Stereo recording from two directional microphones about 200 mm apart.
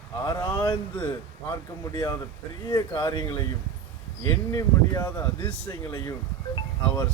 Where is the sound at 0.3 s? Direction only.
10° left (ahead or behind).